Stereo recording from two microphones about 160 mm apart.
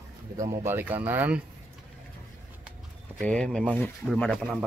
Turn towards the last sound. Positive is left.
turn(degrees=5)  # may be behind; listen again after turning